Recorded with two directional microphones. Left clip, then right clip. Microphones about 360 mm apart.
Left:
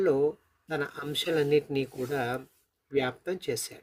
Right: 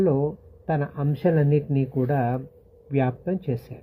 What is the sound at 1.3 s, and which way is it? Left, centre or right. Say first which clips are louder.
Speech: left 2 dB; left.